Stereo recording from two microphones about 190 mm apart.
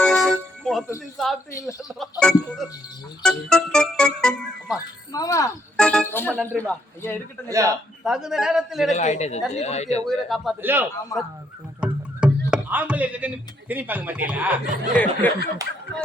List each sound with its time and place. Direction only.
0.0 s music: 5° left (ahead or behind)
1.1 s speech: centre (ahead or behind)
5.1 s a man's voice: 20° left (ahead or behind)
5.7 s a man's voice: 5° left (ahead or behind)
8.0 s speech: 5° right (ahead or behind)
8.9 s speech: 35° left (ahead or behind)
10.1 s speech: centre (ahead or behind)
10.6 s a man's voice: 10° right (ahead or behind)
11.1 s a man's voice: 15° left (ahead or behind)
11.8 s speech: 5° right (ahead or behind)
14.7 s speech: 45° right (ahead or behind)